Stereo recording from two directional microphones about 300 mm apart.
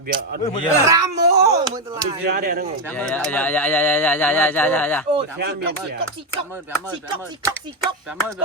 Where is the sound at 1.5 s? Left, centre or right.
Centre.